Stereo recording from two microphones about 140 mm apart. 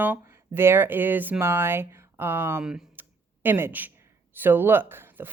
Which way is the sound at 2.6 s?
10° right (ahead or behind).